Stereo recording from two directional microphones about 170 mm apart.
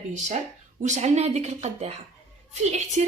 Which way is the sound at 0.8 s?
45° right (ahead or behind).